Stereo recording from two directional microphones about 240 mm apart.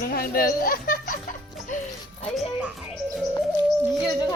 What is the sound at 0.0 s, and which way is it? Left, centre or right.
Speech, left.